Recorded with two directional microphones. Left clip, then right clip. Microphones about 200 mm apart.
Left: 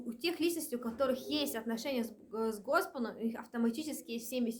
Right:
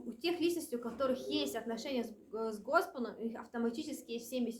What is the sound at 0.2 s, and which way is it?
A woman's voice, 40° left (ahead or behind).